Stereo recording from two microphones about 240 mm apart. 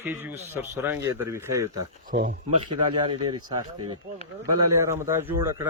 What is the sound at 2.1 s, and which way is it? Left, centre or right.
Speech, right.